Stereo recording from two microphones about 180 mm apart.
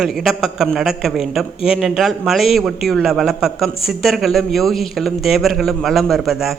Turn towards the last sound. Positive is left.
turn(degrees=0)  # may be behind; listen again after turning